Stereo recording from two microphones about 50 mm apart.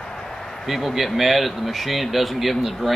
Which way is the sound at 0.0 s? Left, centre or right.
Centre.